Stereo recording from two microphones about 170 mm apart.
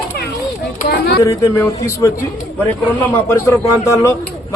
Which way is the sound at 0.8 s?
70° left (ahead or behind).